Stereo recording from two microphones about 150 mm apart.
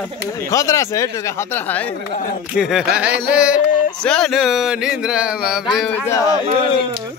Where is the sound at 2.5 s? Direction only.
5° right (ahead or behind).